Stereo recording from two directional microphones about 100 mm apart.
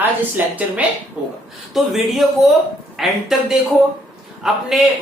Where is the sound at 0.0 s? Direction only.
20° right (ahead or behind); by 3.1 s centre (ahead or behind).